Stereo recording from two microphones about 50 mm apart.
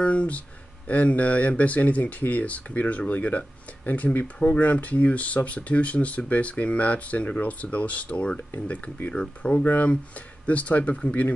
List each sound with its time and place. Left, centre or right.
0.0 s speech: left